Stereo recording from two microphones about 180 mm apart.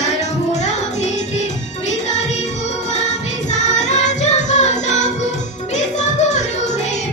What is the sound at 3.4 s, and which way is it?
Music, 40° left (ahead or behind).